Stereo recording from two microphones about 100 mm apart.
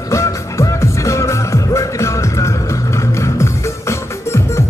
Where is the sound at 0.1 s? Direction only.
30° left (ahead or behind).